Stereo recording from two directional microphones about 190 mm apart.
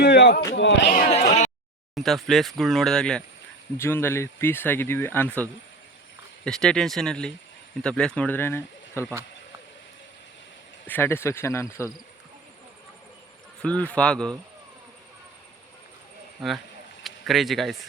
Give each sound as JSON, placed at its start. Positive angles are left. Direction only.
{"t": 0.0, "sound": "a sound", "side_deg": 65}
{"t": 0.9, "sound": "speech", "side_deg": 45}
{"t": 2.0, "sound": "speech", "side_deg": 0}
{"t": 10.8, "sound": "speech", "side_deg": 10}
{"t": 13.6, "sound": "a man's voice", "side_deg": 5}
{"t": 17.0, "sound": "speech", "side_deg": 0}